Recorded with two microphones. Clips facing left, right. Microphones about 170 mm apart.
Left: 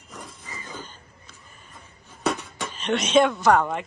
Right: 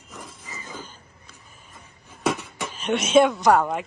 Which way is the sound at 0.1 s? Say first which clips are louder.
Even; centre (ahead or behind).